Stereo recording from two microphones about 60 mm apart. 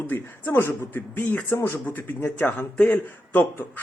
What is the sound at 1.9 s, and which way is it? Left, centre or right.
Speech, left.